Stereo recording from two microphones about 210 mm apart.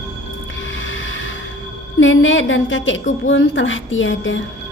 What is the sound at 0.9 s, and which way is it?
Music, 65° left (ahead or behind).